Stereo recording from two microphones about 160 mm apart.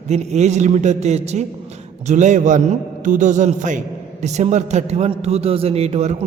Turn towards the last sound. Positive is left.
turn(degrees=-40)  # may be behind; listen again after turning